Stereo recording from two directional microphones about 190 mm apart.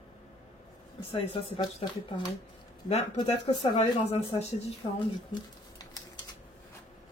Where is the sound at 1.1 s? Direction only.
30° left (ahead or behind).